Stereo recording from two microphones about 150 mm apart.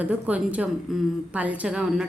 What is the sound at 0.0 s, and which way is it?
A woman's voice, 10° right (ahead or behind).